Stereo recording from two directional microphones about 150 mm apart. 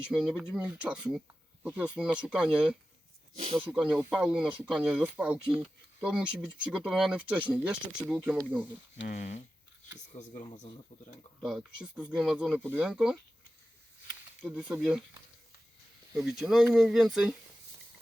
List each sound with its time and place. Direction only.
0.1 s speech: 5° right (ahead or behind)
9.0 s speech: 55° left (ahead or behind)
11.4 s speech: 5° right (ahead or behind)
14.4 s speech: 5° right (ahead or behind)
16.2 s speech: 5° right (ahead or behind)